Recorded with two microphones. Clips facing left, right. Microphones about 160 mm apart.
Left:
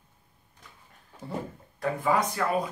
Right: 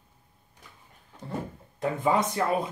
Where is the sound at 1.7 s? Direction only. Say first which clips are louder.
Right 1 dB; 20° right (ahead or behind).